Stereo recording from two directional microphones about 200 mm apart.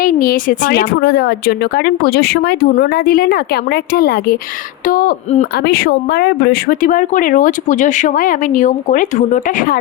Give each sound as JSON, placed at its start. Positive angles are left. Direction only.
{"t": 0.0, "sound": "speech", "side_deg": 45}